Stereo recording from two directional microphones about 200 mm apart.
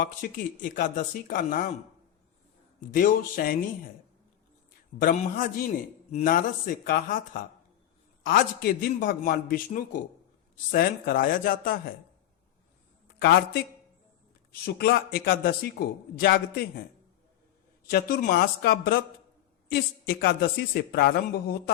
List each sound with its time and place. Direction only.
0.0 s speech: 40° left (ahead or behind)
2.9 s a man's voice: 45° left (ahead or behind)
4.9 s a man's voice: 45° left (ahead or behind)
13.1 s a man's voice: 50° left (ahead or behind)
14.6 s a man's voice: 50° left (ahead or behind)
17.8 s a man's voice: 50° left (ahead or behind)